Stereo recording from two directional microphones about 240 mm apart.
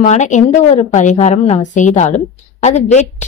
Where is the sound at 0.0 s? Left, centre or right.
Left.